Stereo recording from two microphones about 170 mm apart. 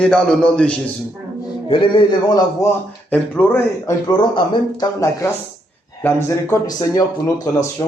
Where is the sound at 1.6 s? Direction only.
30° left (ahead or behind).